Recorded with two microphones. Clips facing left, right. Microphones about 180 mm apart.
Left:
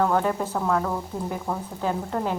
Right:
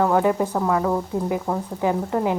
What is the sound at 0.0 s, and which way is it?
A woman's voice, 10° right (ahead or behind).